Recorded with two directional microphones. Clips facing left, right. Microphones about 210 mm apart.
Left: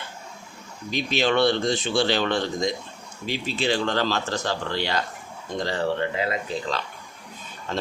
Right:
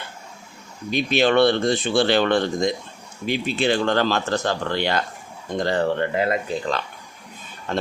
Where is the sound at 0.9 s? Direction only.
55° right (ahead or behind).